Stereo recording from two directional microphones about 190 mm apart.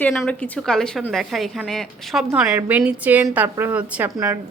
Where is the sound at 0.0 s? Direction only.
10° left (ahead or behind).